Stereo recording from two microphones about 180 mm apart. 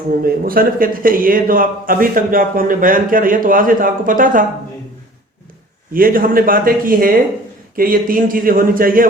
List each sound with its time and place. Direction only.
0.2 s a man's voice: 55° right (ahead or behind)
5.9 s a man's voice: 50° right (ahead or behind)